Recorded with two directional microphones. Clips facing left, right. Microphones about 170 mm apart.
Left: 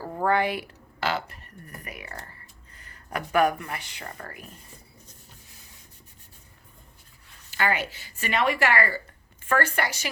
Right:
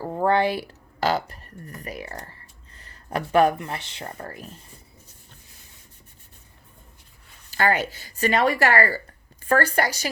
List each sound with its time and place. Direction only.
0.0 s a woman's voice: 20° right (ahead or behind)
7.5 s a woman's voice: 40° right (ahead or behind)